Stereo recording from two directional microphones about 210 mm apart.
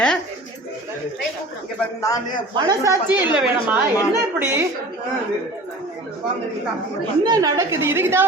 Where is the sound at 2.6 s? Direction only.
15° right (ahead or behind).